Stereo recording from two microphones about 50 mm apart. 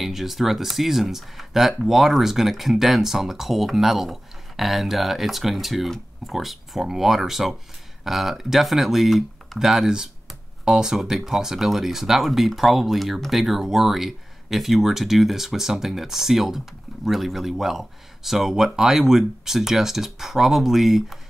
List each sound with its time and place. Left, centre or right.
0.0 s speech: centre